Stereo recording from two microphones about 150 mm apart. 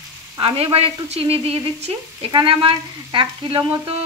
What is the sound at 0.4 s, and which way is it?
Frying, 40° right (ahead or behind).